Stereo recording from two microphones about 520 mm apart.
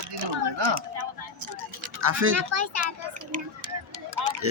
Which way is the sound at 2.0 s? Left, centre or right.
Right.